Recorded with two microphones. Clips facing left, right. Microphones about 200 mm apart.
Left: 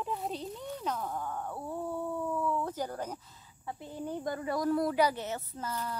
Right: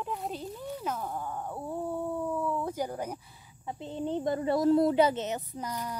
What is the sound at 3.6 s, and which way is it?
Speech, 20° right (ahead or behind).